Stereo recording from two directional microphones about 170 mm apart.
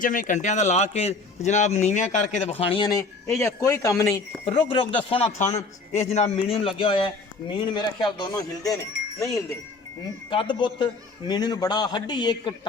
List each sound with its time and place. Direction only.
0.0 s speech: 50° left (ahead or behind)
2.5 s a man's voice: 35° left (ahead or behind)
4.4 s a man's voice: 30° left (ahead or behind)
10.2 s a man's voice: 30° left (ahead or behind)